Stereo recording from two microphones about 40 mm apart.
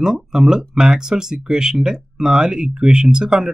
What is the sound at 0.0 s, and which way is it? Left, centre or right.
Speech, centre.